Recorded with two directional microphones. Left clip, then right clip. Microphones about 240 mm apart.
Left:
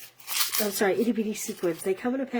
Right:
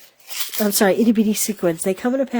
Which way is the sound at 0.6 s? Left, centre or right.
Right.